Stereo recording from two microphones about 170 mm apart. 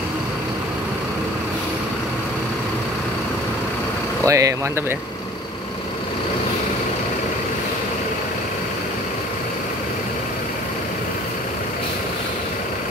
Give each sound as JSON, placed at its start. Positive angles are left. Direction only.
{"t": 4.3, "sound": "speech", "side_deg": -20}